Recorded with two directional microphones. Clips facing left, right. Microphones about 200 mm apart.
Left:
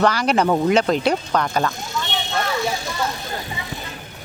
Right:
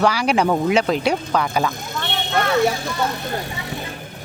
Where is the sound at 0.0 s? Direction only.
10° right (ahead or behind).